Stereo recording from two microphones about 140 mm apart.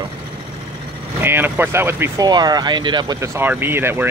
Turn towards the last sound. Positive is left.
turn(degrees=-15)  # may be behind; listen again after turning